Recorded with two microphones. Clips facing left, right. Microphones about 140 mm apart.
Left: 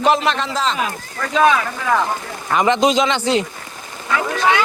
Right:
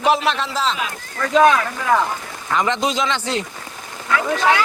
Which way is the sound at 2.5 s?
15° left (ahead or behind).